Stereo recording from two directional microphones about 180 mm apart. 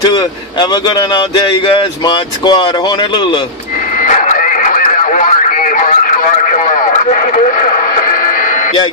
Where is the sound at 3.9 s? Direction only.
45° left (ahead or behind).